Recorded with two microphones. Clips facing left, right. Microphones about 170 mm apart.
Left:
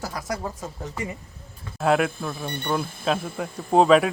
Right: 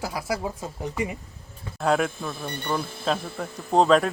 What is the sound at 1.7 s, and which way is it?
Speech, 5° left (ahead or behind).